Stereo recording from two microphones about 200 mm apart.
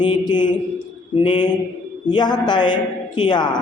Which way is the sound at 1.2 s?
25° left (ahead or behind).